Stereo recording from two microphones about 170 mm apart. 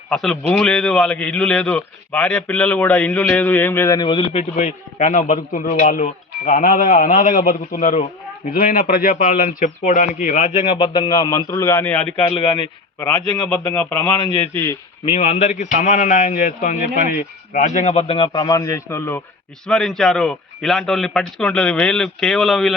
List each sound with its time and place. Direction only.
0.1 s a man's voice: 5° left (ahead or behind)
12.3 s a man's voice: 30° left (ahead or behind)
13.0 s a man's voice: 15° left (ahead or behind)
14.2 s a man's voice: 30° left (ahead or behind)
14.5 s a man's voice: 15° left (ahead or behind)
15.0 s a man's voice: 40° left (ahead or behind)
18.3 s a man's voice: 20° left (ahead or behind)
19.6 s a man's voice: 5° left (ahead or behind)